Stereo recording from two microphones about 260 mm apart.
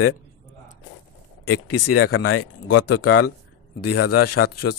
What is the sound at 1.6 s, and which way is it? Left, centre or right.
Speech, left.